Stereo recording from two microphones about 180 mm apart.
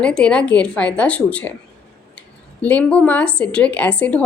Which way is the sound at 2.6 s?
10° left (ahead or behind).